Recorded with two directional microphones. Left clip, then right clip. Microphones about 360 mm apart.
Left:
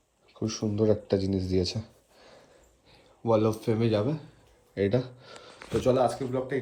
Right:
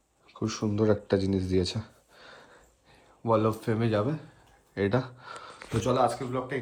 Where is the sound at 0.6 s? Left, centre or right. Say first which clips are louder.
Even; centre.